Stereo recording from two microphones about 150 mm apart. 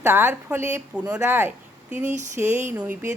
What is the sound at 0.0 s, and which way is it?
A woman's voice, 15° right (ahead or behind).